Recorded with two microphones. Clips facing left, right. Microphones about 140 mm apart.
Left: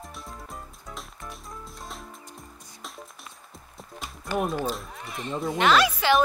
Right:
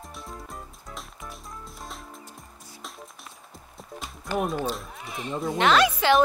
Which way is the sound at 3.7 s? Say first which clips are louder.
Right 1 dB; centre (ahead or behind).